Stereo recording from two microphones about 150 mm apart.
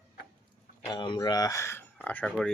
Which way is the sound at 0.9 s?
30° left (ahead or behind).